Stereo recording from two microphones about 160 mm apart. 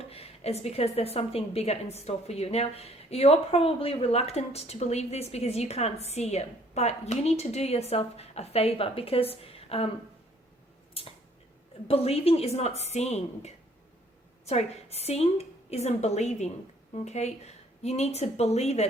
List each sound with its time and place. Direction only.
0.0 s a woman's voice: 40° left (ahead or behind)
11.9 s a woman's voice: 40° left (ahead or behind)